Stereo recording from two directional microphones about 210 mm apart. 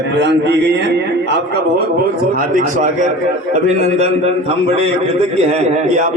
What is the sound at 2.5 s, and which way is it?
Speech, 35° right (ahead or behind).